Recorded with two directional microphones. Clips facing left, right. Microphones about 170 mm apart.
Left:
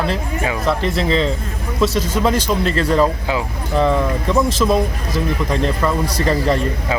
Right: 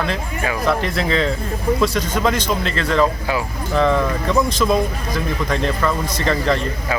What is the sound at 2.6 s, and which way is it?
Speech, 35° left (ahead or behind).